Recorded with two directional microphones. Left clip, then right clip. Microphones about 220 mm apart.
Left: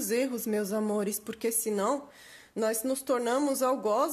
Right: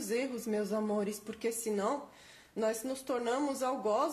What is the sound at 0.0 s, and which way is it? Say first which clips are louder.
A woman's voice: left 5 dB; 50° left (ahead or behind).